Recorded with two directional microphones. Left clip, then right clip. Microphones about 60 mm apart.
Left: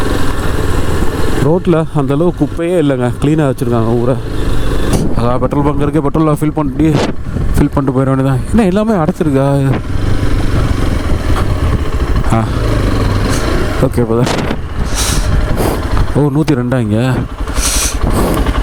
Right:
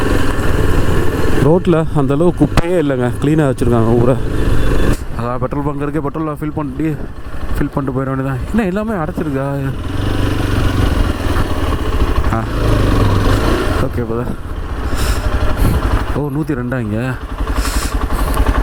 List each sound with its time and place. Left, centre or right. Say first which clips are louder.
0.9 s vehicle: even; centre
1.6 s speech: left 1 dB; left
3.6 s speech: even; centre
3.8 s speech: right 1 dB; centre
5.5 s a man's voice: left 6 dB; left
7.8 s a man's voice: left 5 dB; left
12.6 s vehicle: even; right
16.6 s a man's voice: left 5 dB; left